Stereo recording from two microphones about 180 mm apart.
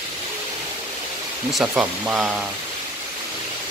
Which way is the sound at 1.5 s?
5° right (ahead or behind).